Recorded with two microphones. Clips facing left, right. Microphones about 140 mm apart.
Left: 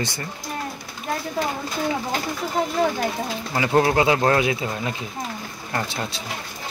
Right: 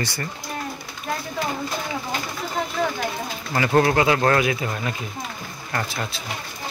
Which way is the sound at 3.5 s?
15° left (ahead or behind).